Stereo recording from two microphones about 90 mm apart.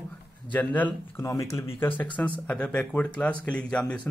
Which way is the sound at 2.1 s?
15° left (ahead or behind).